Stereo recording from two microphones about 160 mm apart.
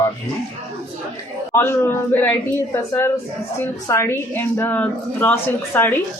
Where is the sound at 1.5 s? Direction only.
15° left (ahead or behind).